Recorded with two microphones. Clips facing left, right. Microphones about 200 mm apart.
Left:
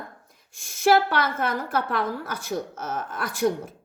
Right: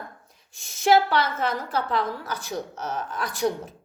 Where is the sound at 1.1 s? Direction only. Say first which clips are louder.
Right 1 dB; 55° left (ahead or behind).